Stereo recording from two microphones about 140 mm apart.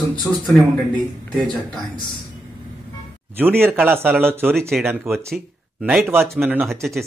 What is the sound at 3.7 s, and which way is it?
Speech, 15° right (ahead or behind).